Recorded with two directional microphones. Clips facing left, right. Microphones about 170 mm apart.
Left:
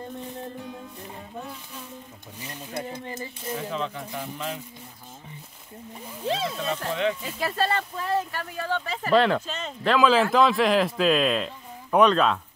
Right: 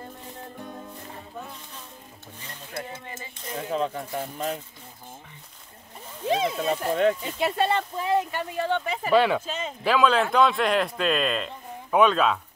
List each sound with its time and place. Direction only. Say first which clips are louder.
2.4 s speech: left 3 dB; 15° left (ahead or behind)
3.5 s speech: right 4 dB; 40° right (ahead or behind)
6.2 s speech: right 3 dB; 15° right (ahead or behind)
6.9 s speech: right 5 dB; 45° right (ahead or behind)
7.2 s speech: right 2 dB; 20° right (ahead or behind); by 12.4 s centre (ahead or behind)